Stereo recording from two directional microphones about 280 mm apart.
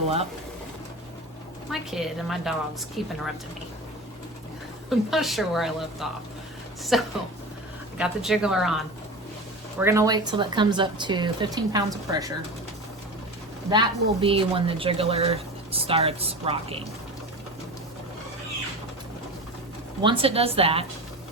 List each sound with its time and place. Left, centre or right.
1.7 s a woman's voice: centre
4.9 s a woman's voice: centre
9.8 s speech: centre
13.7 s speech: centre
20.0 s speech: centre